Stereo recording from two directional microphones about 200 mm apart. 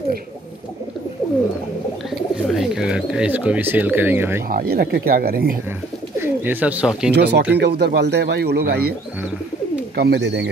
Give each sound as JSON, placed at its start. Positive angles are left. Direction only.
{"t": 2.0, "sound": "bird", "side_deg": 0}
{"t": 4.5, "sound": "speech", "side_deg": -50}
{"t": 6.1, "sound": "speech", "side_deg": -10}
{"t": 7.2, "sound": "speech", "side_deg": -55}
{"t": 9.9, "sound": "speech", "side_deg": -55}